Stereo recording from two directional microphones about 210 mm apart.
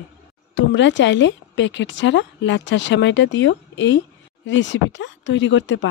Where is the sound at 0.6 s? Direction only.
60° left (ahead or behind).